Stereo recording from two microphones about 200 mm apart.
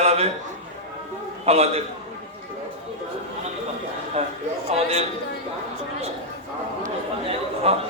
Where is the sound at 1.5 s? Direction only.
30° right (ahead or behind).